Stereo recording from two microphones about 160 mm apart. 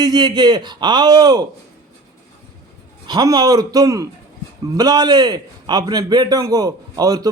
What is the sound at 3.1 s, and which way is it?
A man's voice, 25° right (ahead or behind).